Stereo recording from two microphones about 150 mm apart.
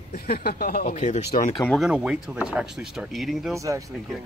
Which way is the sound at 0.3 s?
90° left.